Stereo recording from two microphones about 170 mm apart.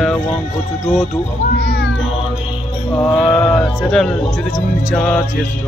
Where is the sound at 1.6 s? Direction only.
75° left (ahead or behind).